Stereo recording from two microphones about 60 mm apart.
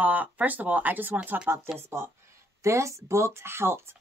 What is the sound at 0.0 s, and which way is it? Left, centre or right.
Speech, right.